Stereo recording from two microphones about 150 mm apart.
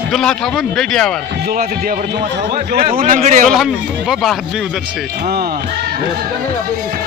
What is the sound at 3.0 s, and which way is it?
Speech, 60° right (ahead or behind).